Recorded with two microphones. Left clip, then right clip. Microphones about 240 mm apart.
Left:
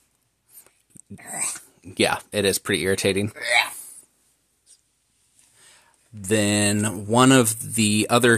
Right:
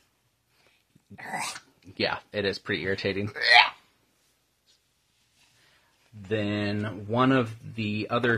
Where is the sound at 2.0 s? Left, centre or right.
Left.